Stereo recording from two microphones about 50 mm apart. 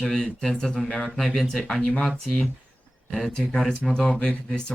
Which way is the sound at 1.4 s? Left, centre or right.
Centre.